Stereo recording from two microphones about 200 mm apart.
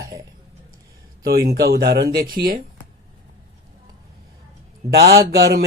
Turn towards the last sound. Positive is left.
turn(degrees=-55)  # may be behind; listen again after turning